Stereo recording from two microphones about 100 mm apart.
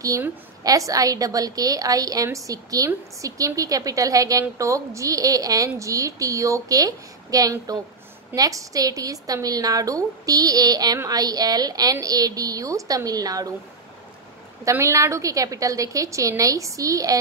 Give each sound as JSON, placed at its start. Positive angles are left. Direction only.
{"t": 0.7, "sound": "a woman's voice", "side_deg": -35}
{"t": 14.6, "sound": "a woman's voice", "side_deg": -30}